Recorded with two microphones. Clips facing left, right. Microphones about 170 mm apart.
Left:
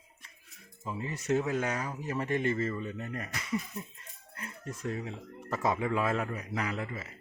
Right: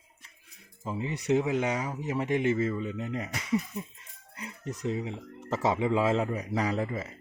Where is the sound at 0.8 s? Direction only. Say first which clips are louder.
Right 4 dB; 20° right (ahead or behind).